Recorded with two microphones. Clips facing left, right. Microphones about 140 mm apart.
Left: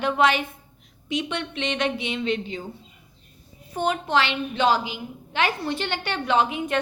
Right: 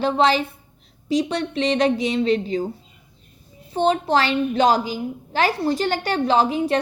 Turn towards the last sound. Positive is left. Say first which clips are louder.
# right 4 dB
turn(degrees=-35)  # may be behind; listen again after turning